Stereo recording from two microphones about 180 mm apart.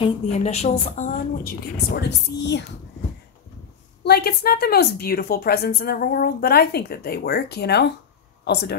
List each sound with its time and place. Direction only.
0.4 s a woman's voice: 35° left (ahead or behind); by 2.6 s 75° left (ahead or behind)
4.0 s speech: 60° left (ahead or behind)